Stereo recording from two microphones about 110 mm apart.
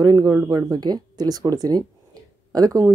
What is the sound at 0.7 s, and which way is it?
Speech, 40° right (ahead or behind).